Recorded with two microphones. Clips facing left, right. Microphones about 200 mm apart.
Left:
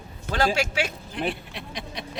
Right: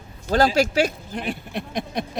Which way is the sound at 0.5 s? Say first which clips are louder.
Right 7 dB; 35° right (ahead or behind).